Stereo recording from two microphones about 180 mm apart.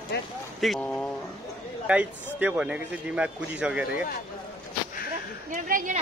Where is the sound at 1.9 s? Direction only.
10° right (ahead or behind).